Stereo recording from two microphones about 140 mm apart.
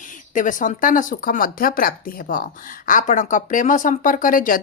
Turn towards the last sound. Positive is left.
turn(degrees=80)